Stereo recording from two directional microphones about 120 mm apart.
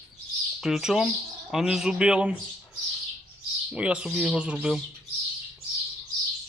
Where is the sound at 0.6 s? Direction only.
5° right (ahead or behind).